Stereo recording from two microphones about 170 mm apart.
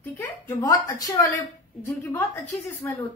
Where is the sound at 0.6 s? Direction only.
25° left (ahead or behind).